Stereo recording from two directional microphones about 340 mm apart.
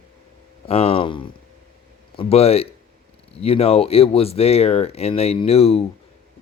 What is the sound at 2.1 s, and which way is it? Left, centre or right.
Speech, centre.